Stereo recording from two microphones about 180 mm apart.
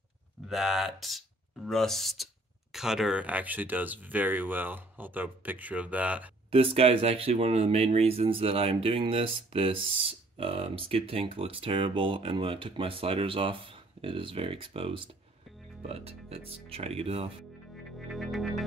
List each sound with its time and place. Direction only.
0.5 s speech: centre (ahead or behind)
6.5 s speech: 30° right (ahead or behind)
17.9 s music: centre (ahead or behind)